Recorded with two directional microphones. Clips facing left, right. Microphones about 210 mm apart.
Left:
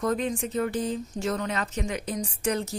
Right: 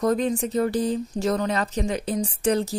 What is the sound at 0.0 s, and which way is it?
Speech, 40° right (ahead or behind).